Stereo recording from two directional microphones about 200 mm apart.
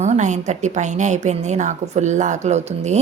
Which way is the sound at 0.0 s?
35° right (ahead or behind).